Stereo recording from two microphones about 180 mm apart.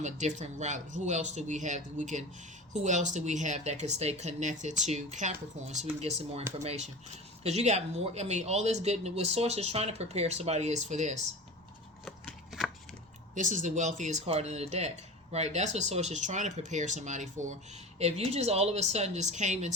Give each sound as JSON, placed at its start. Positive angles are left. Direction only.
{"t": 0.0, "sound": "speech", "side_deg": -40}
{"t": 12.0, "sound": "chopping", "side_deg": 0}
{"t": 13.3, "sound": "speech", "side_deg": -45}